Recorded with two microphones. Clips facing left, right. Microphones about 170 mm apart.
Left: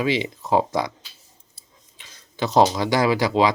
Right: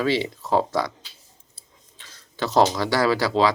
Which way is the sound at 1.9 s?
15° left (ahead or behind).